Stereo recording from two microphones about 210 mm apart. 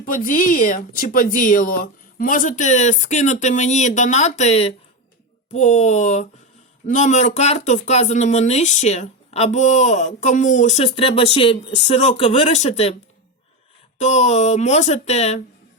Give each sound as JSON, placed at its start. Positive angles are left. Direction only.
{"t": 0.0, "sound": "speech", "side_deg": 40}
{"t": 14.0, "sound": "speech", "side_deg": 30}